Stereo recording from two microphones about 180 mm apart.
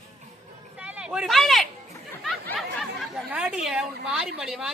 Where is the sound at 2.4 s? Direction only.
Centre (ahead or behind).